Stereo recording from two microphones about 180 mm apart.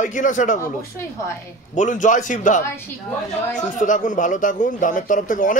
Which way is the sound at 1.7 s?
45° left (ahead or behind).